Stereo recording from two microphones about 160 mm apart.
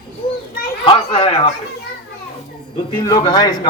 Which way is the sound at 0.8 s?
40° left (ahead or behind).